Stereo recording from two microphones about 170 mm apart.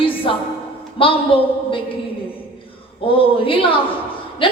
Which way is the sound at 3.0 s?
30° left (ahead or behind).